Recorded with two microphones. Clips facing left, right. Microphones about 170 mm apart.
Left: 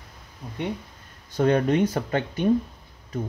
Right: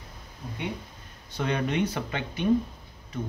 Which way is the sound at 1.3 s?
45° left (ahead or behind).